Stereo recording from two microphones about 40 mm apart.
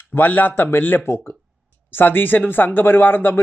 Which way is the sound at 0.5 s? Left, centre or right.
Left.